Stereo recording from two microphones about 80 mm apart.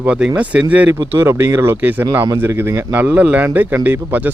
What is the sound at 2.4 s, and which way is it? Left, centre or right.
Speech, right.